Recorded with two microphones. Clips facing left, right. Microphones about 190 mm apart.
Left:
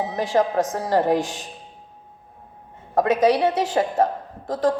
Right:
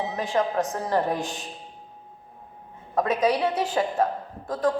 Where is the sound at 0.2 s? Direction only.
90° left.